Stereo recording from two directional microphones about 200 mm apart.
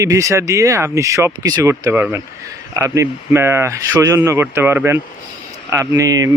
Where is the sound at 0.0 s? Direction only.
15° right (ahead or behind).